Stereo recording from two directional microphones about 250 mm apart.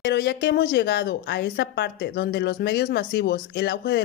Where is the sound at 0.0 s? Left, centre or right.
Left.